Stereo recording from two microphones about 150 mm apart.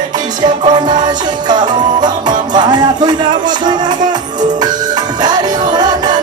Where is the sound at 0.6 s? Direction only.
30° right (ahead or behind).